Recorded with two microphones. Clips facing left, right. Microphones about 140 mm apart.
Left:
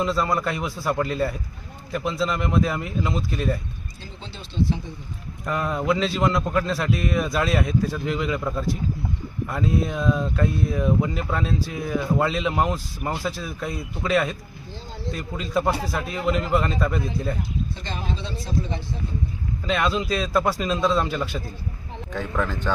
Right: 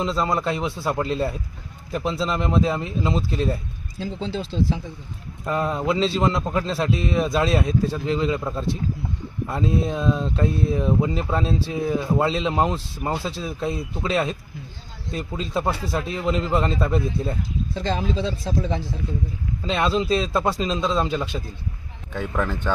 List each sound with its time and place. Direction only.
0.0 s speech: 25° right (ahead or behind)
4.0 s speech: 90° right
5.5 s speech: 25° right (ahead or behind)
17.8 s speech: 90° right
19.6 s speech: 30° right (ahead or behind)
22.1 s speech: 5° right (ahead or behind)